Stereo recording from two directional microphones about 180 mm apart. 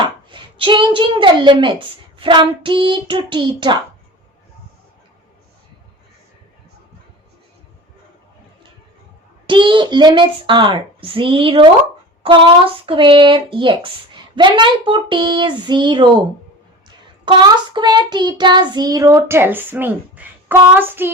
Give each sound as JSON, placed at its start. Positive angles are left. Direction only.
{"t": 0.0, "sound": "a child's voice", "side_deg": -25}
{"t": 9.5, "sound": "speech", "side_deg": -25}
{"t": 17.2, "sound": "speech", "side_deg": -25}